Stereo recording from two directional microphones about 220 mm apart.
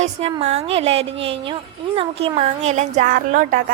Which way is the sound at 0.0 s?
30° right (ahead or behind).